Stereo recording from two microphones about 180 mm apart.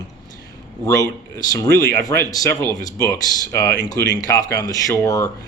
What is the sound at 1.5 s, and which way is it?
Speech, 20° left (ahead or behind).